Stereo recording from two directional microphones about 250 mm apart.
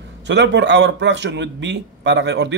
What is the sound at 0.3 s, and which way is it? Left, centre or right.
A man's voice, right.